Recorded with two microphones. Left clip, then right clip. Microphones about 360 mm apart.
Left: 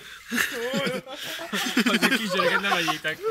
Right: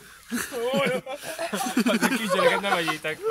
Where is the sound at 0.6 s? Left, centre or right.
Right.